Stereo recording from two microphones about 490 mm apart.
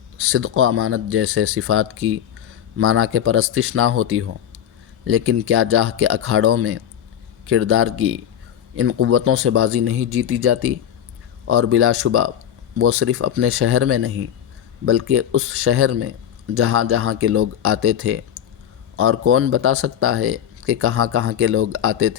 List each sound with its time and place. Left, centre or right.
0.2 s speech: right